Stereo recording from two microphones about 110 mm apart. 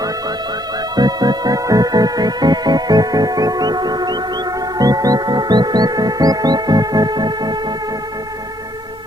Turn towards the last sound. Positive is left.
turn(degrees=-40)  # may be behind; listen again after turning